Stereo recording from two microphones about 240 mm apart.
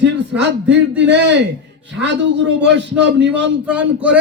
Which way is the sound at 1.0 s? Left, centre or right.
Right.